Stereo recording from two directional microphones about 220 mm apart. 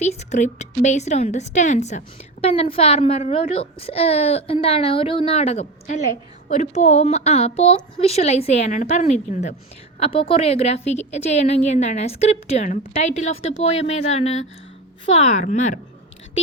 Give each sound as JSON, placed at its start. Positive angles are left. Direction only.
{"t": 0.0, "sound": "a woman's voice", "side_deg": 30}